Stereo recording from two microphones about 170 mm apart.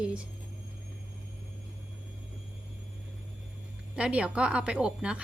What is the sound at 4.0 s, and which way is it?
A woman's voice, 5° right (ahead or behind).